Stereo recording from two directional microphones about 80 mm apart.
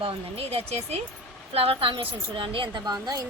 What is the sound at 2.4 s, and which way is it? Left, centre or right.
Speech, right.